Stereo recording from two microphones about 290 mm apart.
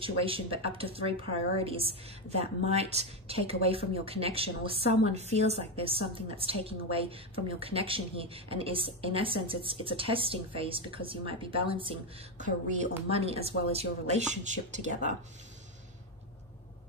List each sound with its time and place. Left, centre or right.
0.0 s a woman's voice: centre